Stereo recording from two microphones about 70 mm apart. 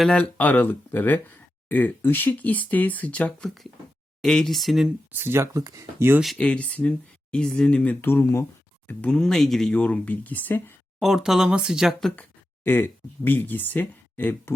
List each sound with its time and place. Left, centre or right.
0.2 s speech: left
3.4 s speech: centre
5.1 s speech: right
6.3 s speech: centre
8.0 s speech: left
9.0 s speech: centre
9.7 s speech: centre
11.0 s speech: centre
12.1 s a sound: left
13.2 s speech: left